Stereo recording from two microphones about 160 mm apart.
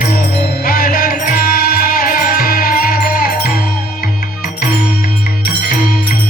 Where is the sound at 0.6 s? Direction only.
65° left (ahead or behind).